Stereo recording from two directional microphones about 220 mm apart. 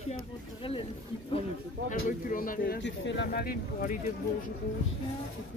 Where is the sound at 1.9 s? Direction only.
35° left (ahead or behind).